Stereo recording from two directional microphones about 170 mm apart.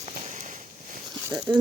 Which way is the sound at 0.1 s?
45° right (ahead or behind).